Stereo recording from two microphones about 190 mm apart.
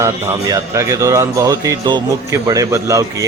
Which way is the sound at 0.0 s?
15° right (ahead or behind).